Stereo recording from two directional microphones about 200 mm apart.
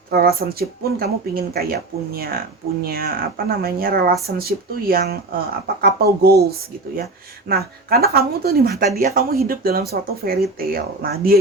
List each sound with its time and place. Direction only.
0.1 s speech: 50° right (ahead or behind)